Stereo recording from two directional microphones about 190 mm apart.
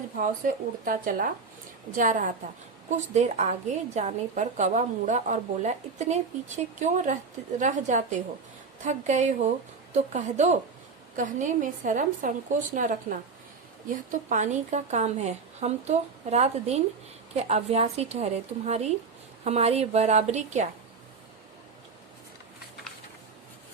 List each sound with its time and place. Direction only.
0.2 s a woman's voice: 45° right (ahead or behind)